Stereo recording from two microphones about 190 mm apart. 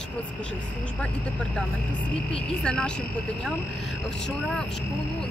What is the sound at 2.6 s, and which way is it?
Speech, 5° left (ahead or behind).